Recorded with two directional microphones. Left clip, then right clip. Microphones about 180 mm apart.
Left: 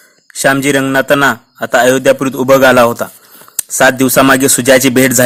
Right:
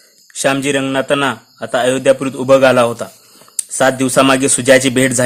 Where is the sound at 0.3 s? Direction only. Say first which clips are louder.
Left 4 dB; 25° left (ahead or behind).